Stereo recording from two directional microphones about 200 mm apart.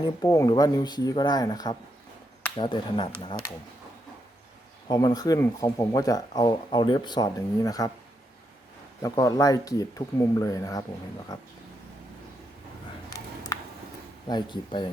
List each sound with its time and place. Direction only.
0.2 s speech: 20° left (ahead or behind)
4.9 s speech: 20° left (ahead or behind)
9.0 s speech: 15° left (ahead or behind)
13.5 s a sound: 15° left (ahead or behind)
14.3 s speech: 20° left (ahead or behind)